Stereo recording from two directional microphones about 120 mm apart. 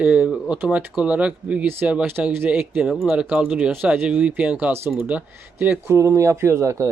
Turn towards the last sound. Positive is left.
turn(degrees=-25)  # may be behind; listen again after turning